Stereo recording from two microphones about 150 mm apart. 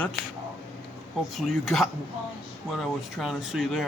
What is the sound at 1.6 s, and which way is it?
Speech, centre (ahead or behind).